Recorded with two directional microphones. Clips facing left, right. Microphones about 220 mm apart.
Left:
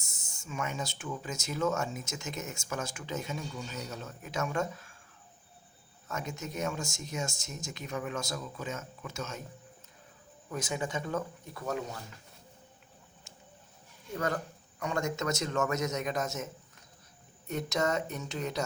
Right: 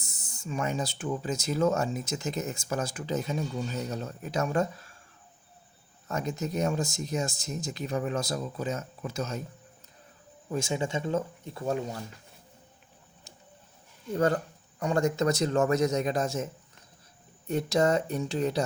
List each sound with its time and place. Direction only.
0.0 s speech: 35° right (ahead or behind)
6.1 s speech: 35° right (ahead or behind)
10.5 s speech: 25° right (ahead or behind)
14.1 s speech: 30° right (ahead or behind)
17.5 s speech: 30° right (ahead or behind)